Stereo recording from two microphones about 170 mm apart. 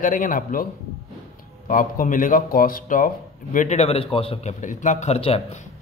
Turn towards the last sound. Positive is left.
turn(degrees=35)  # may be behind; listen again after turning